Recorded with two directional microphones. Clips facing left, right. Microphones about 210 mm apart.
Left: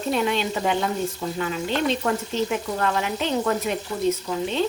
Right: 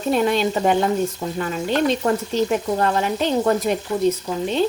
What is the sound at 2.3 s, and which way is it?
Speech, 40° right (ahead or behind).